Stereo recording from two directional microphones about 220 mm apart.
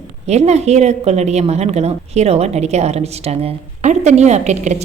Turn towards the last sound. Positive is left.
turn(degrees=-30)  # may be behind; listen again after turning